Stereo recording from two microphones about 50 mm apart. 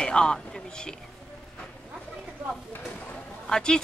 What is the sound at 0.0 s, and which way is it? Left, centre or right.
Speech, centre.